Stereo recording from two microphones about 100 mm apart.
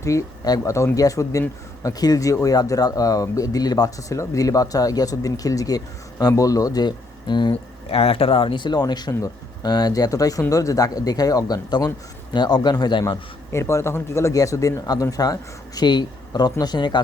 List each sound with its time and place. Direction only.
0.0 s speech: 30° left (ahead or behind); by 7.5 s 50° left (ahead or behind)
7.5 s speech: 75° left (ahead or behind); by 13.1 s 45° left (ahead or behind)
13.5 s speech: 30° left (ahead or behind); by 17.0 s 50° left (ahead or behind)